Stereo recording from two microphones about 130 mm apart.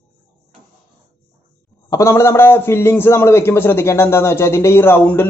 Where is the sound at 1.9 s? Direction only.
25° left (ahead or behind).